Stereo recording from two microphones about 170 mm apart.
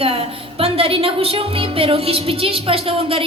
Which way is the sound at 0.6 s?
35° right (ahead or behind).